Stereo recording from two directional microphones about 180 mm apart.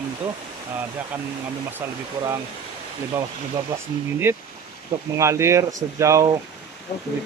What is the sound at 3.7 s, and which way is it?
Speech, 15° right (ahead or behind).